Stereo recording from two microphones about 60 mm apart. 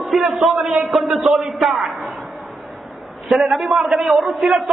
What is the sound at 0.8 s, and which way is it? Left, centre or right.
A man's voice, centre.